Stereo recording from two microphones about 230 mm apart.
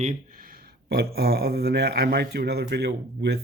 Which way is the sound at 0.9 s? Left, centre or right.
Right.